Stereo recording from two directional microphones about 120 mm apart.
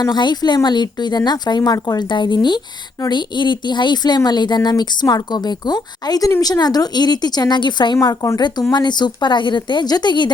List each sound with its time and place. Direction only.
0.0 s speech: 40° left (ahead or behind)
7.9 s speech: 30° left (ahead or behind)
8.4 s speech: 40° left (ahead or behind)